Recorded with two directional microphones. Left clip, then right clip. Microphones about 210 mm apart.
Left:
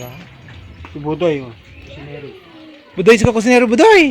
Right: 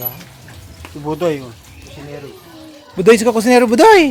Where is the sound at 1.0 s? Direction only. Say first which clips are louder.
Left 1 dB; 15° left (ahead or behind).